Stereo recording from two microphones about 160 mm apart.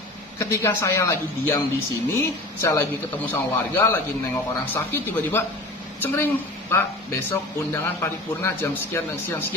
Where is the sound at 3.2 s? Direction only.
15° left (ahead or behind).